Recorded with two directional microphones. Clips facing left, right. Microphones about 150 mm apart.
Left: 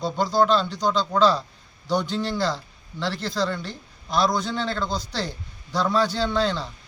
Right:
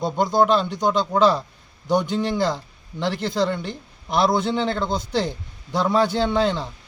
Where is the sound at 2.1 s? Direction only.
20° right (ahead or behind).